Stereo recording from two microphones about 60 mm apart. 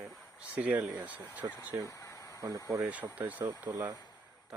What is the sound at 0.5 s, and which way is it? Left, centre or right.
Speech, right.